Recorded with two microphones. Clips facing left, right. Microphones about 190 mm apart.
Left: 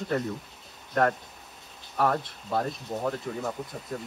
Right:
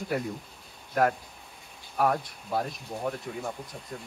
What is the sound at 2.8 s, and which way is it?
Speech, 70° left (ahead or behind).